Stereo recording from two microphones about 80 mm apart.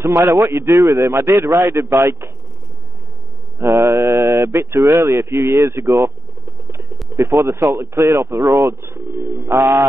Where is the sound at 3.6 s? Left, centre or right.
Right.